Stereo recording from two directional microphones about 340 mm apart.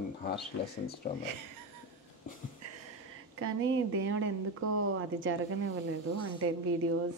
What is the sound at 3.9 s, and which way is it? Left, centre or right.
A woman's voice, right.